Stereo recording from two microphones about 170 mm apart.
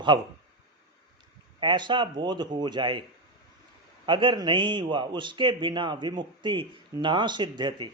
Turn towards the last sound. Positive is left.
turn(degrees=-25)  # may be behind; listen again after turning